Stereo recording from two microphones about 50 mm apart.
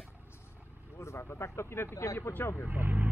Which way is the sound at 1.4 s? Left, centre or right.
Left.